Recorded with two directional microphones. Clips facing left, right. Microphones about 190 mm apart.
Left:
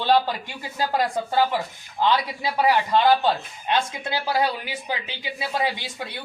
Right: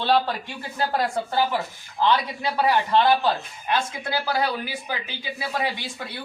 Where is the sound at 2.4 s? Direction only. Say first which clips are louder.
Left 1 dB; 15° left (ahead or behind).